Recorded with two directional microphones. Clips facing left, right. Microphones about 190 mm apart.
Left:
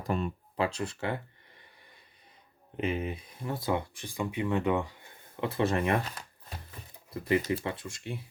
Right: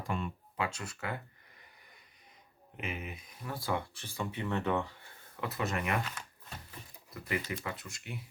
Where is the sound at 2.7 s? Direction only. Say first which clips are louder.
Left 9 dB; 30° left (ahead or behind).